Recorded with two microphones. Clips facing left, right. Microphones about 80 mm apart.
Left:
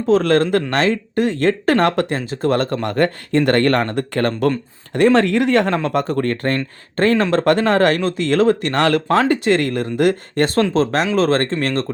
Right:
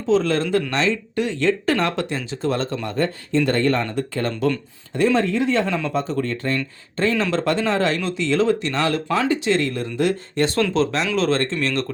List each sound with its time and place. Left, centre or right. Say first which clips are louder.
0.1 s speech: left 4 dB; left